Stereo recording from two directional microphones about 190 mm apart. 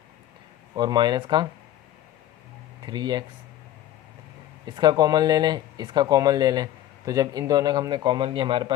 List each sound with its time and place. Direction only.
0.8 s speech: 20° right (ahead or behind)
2.8 s speech: 20° right (ahead or behind)
4.6 s speech: 20° right (ahead or behind)